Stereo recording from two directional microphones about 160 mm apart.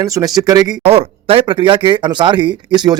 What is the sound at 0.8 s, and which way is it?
Speech, 40° right (ahead or behind).